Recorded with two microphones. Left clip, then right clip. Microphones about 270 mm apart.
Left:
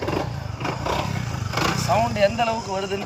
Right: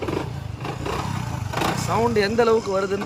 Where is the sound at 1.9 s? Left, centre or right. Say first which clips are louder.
Right 2 dB; centre.